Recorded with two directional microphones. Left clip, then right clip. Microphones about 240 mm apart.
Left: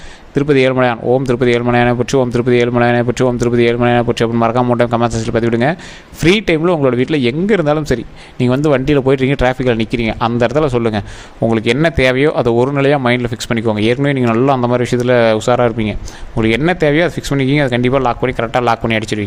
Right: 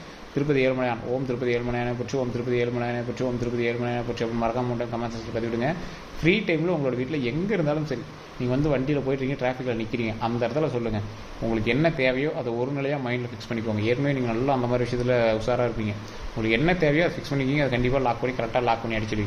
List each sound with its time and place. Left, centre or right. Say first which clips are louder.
0.3 s speech: left 11 dB; left